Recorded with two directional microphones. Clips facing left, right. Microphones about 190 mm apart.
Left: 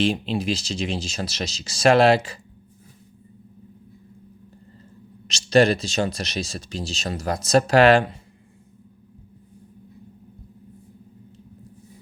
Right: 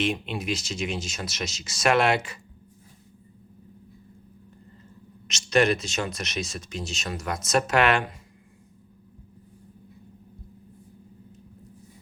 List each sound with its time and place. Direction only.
0.0 s speech: 30° left (ahead or behind)
5.3 s speech: 35° left (ahead or behind)